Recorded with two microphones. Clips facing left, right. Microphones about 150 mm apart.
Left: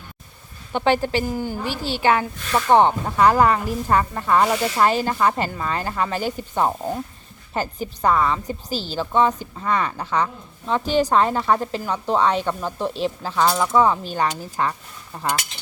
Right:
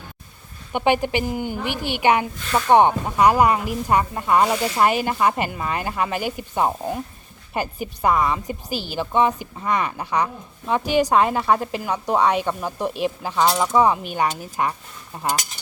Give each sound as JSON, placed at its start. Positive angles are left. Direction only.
{"t": 0.7, "sound": "a woman's voice", "side_deg": -15}